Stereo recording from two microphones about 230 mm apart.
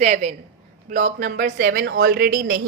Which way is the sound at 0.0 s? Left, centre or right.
Right.